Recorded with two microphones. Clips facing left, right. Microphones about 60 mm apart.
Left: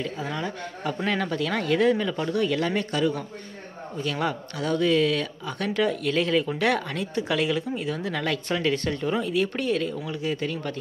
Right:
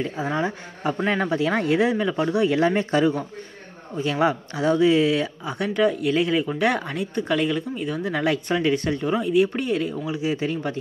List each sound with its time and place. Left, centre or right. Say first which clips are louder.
0.0 s speech: right 5 dB; right; by 8.1 s centre
8.1 s speech: right 6 dB; centre